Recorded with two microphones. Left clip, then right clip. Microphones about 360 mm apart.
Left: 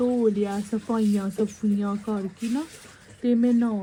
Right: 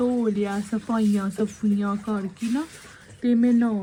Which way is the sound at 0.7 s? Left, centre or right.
Right.